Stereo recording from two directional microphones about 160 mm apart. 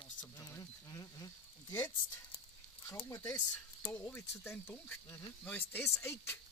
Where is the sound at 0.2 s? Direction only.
20° left (ahead or behind).